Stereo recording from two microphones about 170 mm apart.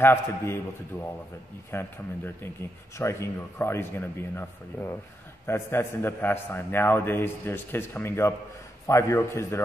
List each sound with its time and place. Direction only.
0.0 s speech: 15° left (ahead or behind)
1.7 s speech: 15° left (ahead or behind)